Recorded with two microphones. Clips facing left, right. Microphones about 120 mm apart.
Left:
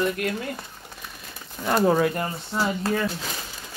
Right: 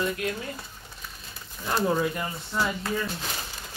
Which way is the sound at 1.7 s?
60° left (ahead or behind).